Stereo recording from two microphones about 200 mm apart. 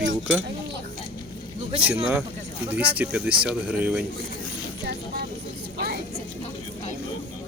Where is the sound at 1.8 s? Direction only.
5° right (ahead or behind).